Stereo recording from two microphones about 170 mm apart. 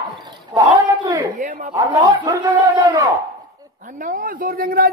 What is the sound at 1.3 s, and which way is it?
Speech, 55° right (ahead or behind).